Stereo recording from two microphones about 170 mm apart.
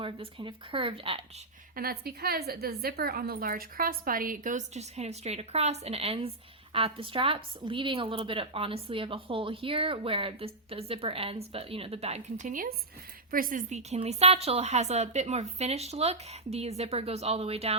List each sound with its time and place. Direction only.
0.0 s speech: 30° right (ahead or behind)
1.7 s a woman's voice: 60° right (ahead or behind); by 17.7 s 35° right (ahead or behind)